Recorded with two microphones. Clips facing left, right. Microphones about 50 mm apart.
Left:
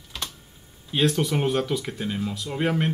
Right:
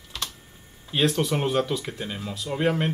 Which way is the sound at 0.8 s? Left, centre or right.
Centre.